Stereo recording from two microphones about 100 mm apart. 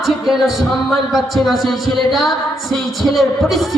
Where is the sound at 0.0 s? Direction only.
Centre (ahead or behind).